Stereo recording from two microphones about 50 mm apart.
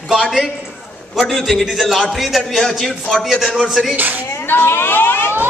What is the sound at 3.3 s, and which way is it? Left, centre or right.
Speech, centre.